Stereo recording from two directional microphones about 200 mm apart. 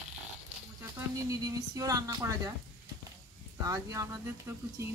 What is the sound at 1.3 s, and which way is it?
A woman's voice, 15° right (ahead or behind).